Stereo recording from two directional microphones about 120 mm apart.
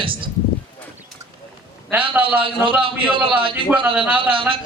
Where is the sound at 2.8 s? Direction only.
45° right (ahead or behind).